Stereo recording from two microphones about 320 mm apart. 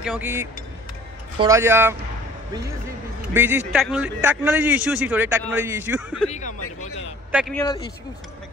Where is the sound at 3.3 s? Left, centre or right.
Centre.